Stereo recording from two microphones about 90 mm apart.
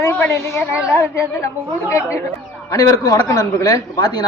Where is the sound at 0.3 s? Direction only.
30° left (ahead or behind).